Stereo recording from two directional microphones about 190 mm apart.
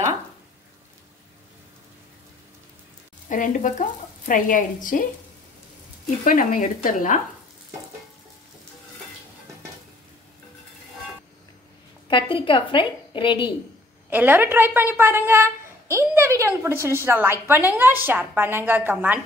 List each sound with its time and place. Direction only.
3.3 s speech: 45° left (ahead or behind)
6.2 s speech: 45° left (ahead or behind)
12.1 s a woman's voice: 25° left (ahead or behind)
14.1 s a woman's voice: 10° right (ahead or behind)